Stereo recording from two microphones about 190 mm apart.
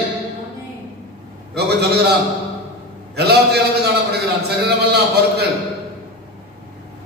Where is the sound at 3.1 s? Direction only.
60° right (ahead or behind).